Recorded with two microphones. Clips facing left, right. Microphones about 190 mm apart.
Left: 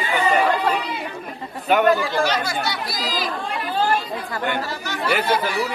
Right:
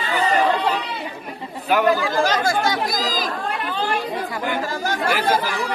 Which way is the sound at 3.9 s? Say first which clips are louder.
Even; 5° right (ahead or behind).